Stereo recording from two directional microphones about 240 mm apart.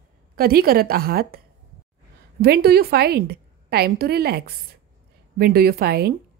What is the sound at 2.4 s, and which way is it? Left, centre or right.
A woman's voice, right.